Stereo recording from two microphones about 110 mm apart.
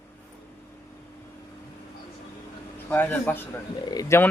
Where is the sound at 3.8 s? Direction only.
40° left (ahead or behind).